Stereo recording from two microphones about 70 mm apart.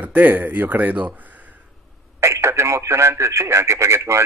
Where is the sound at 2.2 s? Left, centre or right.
Right.